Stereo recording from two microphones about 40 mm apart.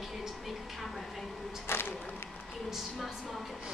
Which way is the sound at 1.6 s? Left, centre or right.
Left.